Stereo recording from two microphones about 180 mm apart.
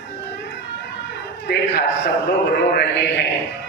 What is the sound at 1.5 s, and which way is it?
Speech, 75° left (ahead or behind).